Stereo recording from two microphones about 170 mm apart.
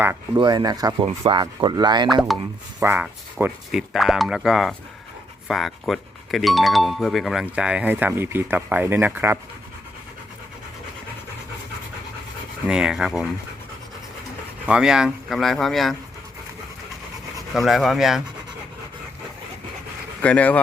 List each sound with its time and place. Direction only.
0.3 s speech: 25° right (ahead or behind)
1.0 s speech: 35° right (ahead or behind)
1.4 s speech: 25° right (ahead or behind)
2.3 s speech: centre (ahead or behind)
2.8 s speech: 10° right (ahead or behind)
12.6 s speech: 5° right (ahead or behind)
14.7 s speech: 5° right (ahead or behind)
17.5 s speech: centre (ahead or behind)
20.2 s speech: 10° left (ahead or behind)